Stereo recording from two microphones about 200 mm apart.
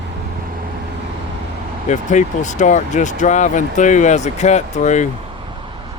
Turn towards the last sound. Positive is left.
turn(degrees=35)  # may be behind; listen again after turning